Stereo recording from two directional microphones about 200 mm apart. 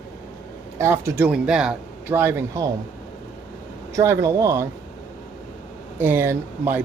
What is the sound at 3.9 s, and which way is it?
Speech, 15° right (ahead or behind).